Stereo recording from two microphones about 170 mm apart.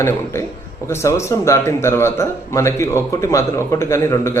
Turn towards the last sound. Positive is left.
turn(degrees=15)  # may be behind; listen again after turning